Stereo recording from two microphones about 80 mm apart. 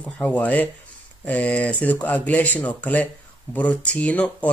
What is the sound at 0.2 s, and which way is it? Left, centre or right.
Speech, centre.